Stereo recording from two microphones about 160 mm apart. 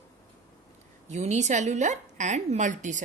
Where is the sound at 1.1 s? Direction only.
45° right (ahead or behind).